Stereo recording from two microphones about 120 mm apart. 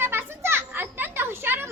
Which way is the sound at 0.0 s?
20° right (ahead or behind).